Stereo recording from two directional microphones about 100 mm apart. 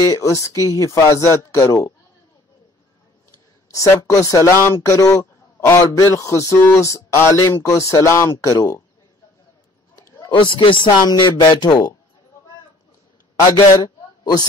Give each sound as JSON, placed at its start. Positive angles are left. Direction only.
{"t": 0.0, "sound": "speech", "side_deg": 35}
{"t": 3.7, "sound": "speech", "side_deg": 35}
{"t": 10.3, "sound": "speech", "side_deg": 55}
{"t": 13.8, "sound": "a sound", "side_deg": 40}